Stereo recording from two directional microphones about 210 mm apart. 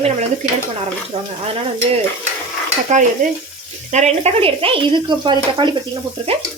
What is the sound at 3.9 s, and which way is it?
Speech, 30° right (ahead or behind).